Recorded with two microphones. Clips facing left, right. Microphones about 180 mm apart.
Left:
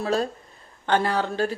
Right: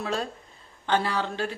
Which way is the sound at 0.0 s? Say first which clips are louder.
Left 5 dB; 40° left (ahead or behind).